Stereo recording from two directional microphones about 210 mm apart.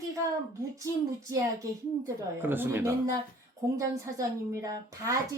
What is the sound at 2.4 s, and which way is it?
Speech, 10° right (ahead or behind).